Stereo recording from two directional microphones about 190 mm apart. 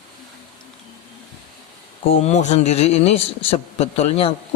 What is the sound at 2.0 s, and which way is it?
A man's voice, 35° left (ahead or behind).